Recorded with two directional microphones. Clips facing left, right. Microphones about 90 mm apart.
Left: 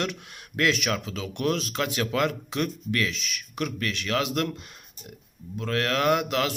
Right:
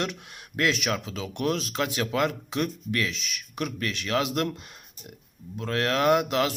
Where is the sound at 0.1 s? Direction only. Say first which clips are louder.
Left 1 dB; 20° right (ahead or behind).